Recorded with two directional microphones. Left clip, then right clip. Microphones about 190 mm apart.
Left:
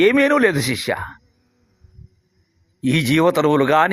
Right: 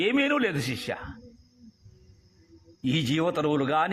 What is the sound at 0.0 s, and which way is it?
Speech, 30° left (ahead or behind).